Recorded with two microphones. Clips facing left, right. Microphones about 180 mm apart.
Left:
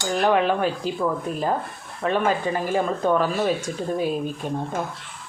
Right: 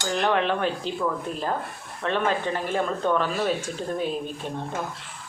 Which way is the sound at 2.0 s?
10° left (ahead or behind).